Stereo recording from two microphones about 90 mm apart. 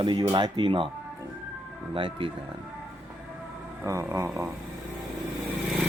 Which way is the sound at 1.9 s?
85° right.